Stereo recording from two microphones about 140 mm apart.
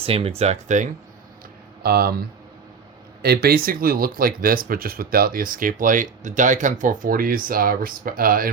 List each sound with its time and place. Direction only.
0.0 s speech: 45° right (ahead or behind)
1.8 s speech: 90° right
3.4 s speech: 90° right